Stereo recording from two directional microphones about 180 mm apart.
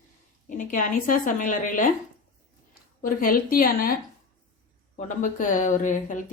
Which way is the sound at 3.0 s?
50° left (ahead or behind).